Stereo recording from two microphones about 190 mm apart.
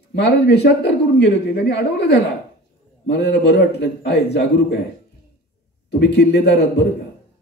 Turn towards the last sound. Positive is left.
turn(degrees=60)  # may be behind; listen again after turning